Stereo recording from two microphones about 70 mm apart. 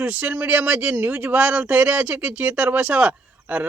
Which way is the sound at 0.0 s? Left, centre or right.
Centre.